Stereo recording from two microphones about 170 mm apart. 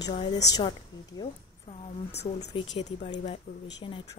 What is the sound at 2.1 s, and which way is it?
Speech, 40° left (ahead or behind).